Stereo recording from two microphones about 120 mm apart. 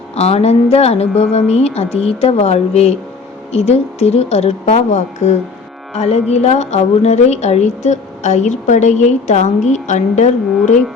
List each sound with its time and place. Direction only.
0.2 s speech: 60° left (ahead or behind)
5.9 s a woman's voice: 60° left (ahead or behind); by 10.8 s 80° left